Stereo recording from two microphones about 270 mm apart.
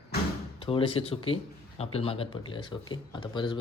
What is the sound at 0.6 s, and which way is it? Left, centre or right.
Speech, centre.